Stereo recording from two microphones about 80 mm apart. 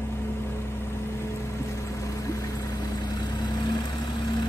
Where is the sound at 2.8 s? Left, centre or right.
Left.